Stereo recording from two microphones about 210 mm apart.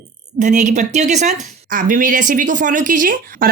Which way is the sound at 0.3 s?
35° right (ahead or behind).